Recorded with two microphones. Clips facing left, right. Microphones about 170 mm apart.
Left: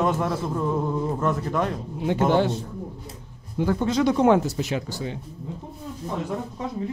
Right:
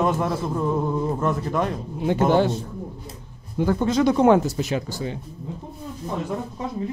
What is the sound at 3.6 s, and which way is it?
A man's voice, 45° right (ahead or behind).